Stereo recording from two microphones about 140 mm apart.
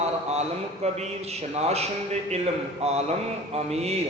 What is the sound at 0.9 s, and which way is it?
A man's voice, 50° right (ahead or behind).